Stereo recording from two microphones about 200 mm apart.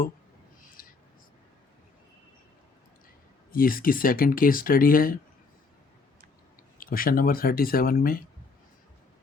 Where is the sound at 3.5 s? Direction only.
45° left (ahead or behind).